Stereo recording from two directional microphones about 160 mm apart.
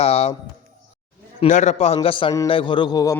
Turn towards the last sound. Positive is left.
turn(degrees=25)  # may be behind; listen again after turning